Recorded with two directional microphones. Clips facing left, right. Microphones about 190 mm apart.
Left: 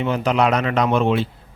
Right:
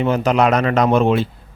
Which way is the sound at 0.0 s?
45° right (ahead or behind).